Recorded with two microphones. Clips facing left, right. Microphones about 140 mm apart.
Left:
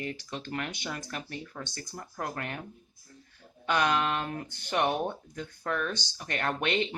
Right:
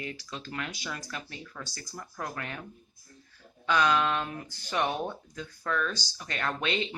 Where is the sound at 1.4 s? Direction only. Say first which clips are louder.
Left 2 dB; 30° left (ahead or behind).